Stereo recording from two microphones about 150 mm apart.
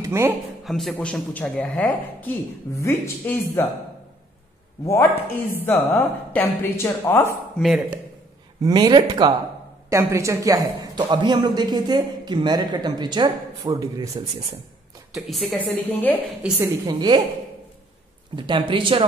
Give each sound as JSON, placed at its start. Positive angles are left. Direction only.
{"t": 0.0, "sound": "a man's voice", "side_deg": -15}
{"t": 0.7, "sound": "a woman's voice", "side_deg": 0}
{"t": 4.8, "sound": "speech", "side_deg": 15}
{"t": 7.6, "sound": "a woman's voice", "side_deg": -5}
{"t": 8.6, "sound": "speech", "side_deg": -25}
{"t": 15.1, "sound": "a woman's voice", "side_deg": 0}
{"t": 16.8, "sound": "speech", "side_deg": -30}
{"t": 18.3, "sound": "speech", "side_deg": -35}